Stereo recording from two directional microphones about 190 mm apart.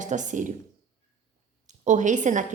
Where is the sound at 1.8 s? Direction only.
40° right (ahead or behind).